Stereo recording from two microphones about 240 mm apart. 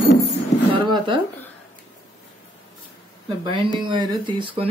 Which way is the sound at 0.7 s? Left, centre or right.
Centre.